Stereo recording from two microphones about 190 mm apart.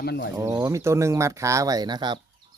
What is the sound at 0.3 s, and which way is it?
Speech, 20° right (ahead or behind).